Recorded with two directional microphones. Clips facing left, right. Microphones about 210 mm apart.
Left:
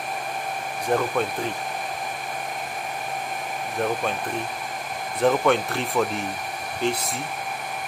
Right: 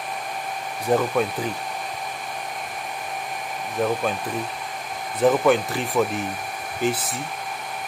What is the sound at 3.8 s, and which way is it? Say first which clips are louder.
Speech: right 3 dB; 5° right (ahead or behind).